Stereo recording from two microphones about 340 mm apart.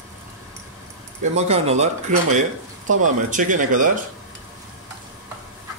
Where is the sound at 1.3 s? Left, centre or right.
Centre.